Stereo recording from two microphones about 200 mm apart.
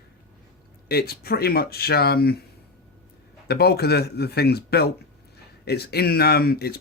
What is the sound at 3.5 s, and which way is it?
Speech, 55° left (ahead or behind).